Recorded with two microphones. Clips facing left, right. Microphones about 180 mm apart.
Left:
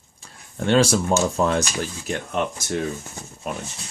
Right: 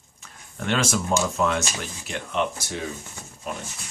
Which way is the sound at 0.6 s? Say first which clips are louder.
Left 7 dB; 35° left (ahead or behind).